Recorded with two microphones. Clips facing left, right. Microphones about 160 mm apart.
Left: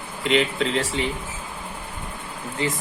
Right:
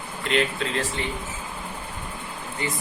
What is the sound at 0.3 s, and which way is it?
Speech, 90° left.